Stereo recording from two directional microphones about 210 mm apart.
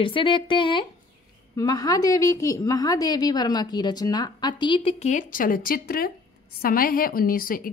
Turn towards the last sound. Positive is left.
turn(degrees=40)  # may be behind; listen again after turning